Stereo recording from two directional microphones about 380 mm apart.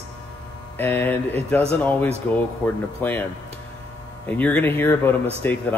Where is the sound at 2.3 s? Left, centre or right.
Centre.